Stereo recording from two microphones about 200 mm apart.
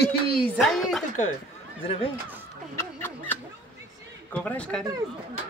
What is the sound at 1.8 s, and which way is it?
Speech, 30° left (ahead or behind).